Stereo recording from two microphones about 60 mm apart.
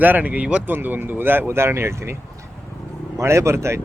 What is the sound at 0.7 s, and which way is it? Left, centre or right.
Speech, right.